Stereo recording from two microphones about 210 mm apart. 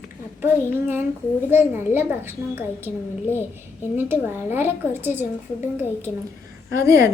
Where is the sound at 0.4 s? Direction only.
10° right (ahead or behind).